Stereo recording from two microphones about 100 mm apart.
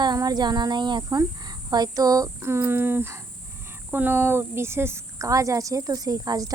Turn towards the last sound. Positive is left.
turn(degrees=-40)  # may be behind; listen again after turning